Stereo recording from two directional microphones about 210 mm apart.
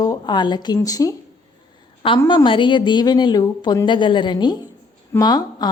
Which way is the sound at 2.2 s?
20° left (ahead or behind).